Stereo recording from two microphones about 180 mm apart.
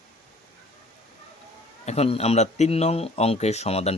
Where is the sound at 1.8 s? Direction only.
35° left (ahead or behind).